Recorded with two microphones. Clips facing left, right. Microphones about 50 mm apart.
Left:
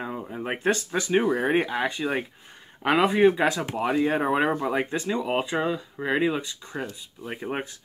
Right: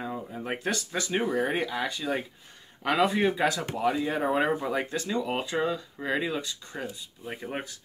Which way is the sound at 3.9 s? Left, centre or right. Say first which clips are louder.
Left 7 dB; left.